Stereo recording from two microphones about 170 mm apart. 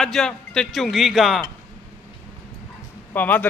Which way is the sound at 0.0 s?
5° left (ahead or behind).